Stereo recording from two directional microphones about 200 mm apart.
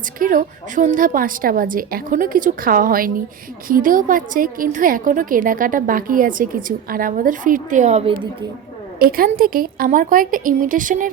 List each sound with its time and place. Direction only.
0.2 s a woman's voice: 45° right (ahead or behind)
9.0 s a woman's voice: 45° right (ahead or behind)